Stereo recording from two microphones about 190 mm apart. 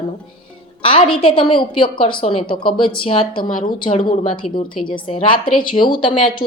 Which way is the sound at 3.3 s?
50° left (ahead or behind).